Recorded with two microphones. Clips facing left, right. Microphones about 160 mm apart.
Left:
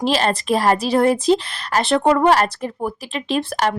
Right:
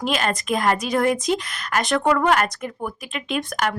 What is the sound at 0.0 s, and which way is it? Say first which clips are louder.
A woman's voice: left 4 dB; 30° left (ahead or behind).